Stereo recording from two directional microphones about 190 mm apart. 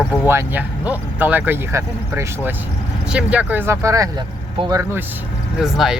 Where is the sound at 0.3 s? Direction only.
10° right (ahead or behind).